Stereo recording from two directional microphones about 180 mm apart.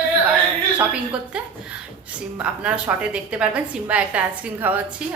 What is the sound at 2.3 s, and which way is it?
A woman's voice, 5° right (ahead or behind).